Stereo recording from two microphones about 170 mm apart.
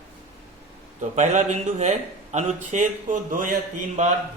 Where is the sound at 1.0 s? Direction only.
45° right (ahead or behind).